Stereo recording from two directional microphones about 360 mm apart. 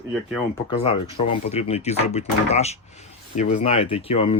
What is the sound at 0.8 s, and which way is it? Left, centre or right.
Speech, centre.